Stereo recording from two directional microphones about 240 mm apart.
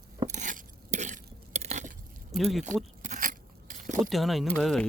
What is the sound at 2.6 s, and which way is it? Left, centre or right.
Crunch, right.